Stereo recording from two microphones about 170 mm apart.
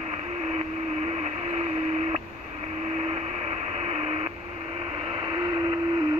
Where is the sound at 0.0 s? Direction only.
40° right (ahead or behind).